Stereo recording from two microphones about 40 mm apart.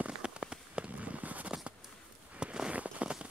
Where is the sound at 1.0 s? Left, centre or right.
Right.